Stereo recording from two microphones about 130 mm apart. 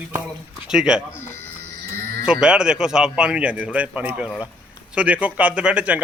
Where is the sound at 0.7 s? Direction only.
5° right (ahead or behind).